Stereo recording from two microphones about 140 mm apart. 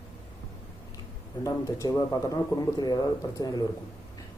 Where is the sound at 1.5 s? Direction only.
20° left (ahead or behind).